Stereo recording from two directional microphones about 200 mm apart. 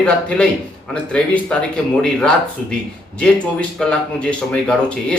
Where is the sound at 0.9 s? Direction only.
5° left (ahead or behind).